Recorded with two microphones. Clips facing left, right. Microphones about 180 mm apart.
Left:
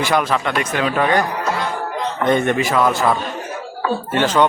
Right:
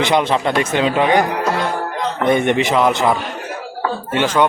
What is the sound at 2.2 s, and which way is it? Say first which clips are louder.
A man's voice: right 2 dB; 15° right (ahead or behind).